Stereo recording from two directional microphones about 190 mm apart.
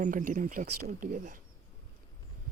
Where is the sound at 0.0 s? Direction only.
45° right (ahead or behind).